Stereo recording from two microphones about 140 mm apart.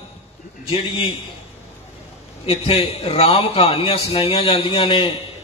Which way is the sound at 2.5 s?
45° left (ahead or behind).